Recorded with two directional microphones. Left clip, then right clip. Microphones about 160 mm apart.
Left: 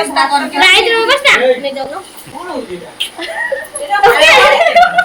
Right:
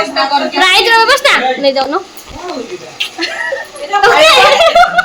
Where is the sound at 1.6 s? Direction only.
50° right (ahead or behind).